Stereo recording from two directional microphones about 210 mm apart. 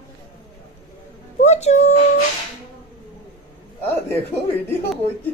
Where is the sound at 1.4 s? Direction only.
30° left (ahead or behind).